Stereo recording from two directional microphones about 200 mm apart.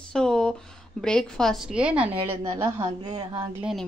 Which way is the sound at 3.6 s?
Centre (ahead or behind).